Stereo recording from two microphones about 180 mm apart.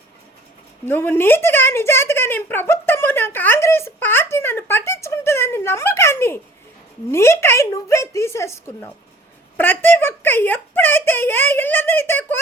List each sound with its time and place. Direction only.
0.9 s speech: 10° left (ahead or behind)